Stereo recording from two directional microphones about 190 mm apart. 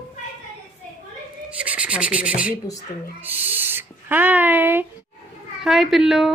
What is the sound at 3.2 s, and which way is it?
Owl, 10° right (ahead or behind).